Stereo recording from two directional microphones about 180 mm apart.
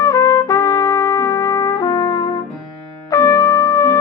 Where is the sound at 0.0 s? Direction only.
20° left (ahead or behind).